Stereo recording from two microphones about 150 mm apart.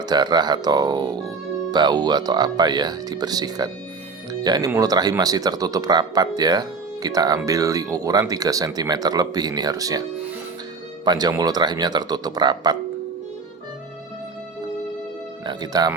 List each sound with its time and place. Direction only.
0.0 s speech: 30° right (ahead or behind)
11.0 s speech: 25° right (ahead or behind)
15.4 s speech: 25° right (ahead or behind)